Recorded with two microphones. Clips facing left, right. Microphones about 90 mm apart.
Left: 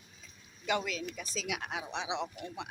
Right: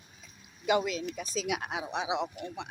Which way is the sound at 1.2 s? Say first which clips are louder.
Right 5 dB; 20° right (ahead or behind).